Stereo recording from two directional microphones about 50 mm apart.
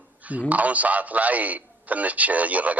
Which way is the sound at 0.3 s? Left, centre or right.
Right.